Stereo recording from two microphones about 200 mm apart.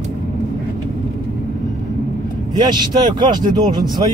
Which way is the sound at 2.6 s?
20° right (ahead or behind).